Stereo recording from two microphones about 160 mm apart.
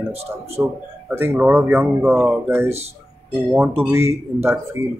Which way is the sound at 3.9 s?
15° right (ahead or behind).